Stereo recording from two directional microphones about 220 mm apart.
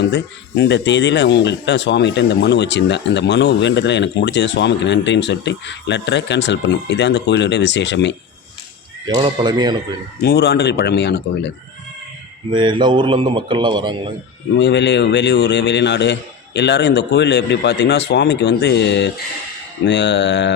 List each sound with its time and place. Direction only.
0.0 s speech: 50° left (ahead or behind)
9.0 s a man's voice: 20° right (ahead or behind)
10.2 s speech: 45° left (ahead or behind)
12.5 s a man's voice: 20° right (ahead or behind)
14.5 s speech: 50° left (ahead or behind)